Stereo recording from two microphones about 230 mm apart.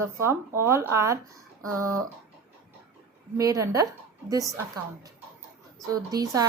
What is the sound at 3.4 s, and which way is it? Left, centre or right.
A woman's voice, centre.